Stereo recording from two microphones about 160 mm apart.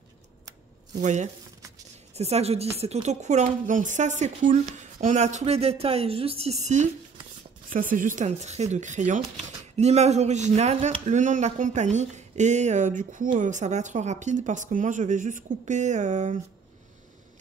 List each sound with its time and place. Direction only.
0.9 s speech: 45° right (ahead or behind)